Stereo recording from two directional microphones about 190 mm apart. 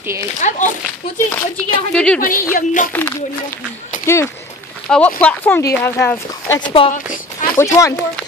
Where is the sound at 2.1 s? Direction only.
45° left (ahead or behind).